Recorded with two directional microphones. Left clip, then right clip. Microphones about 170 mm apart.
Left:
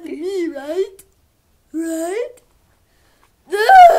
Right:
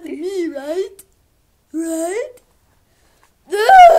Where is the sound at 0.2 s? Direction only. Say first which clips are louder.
Even; 20° right (ahead or behind).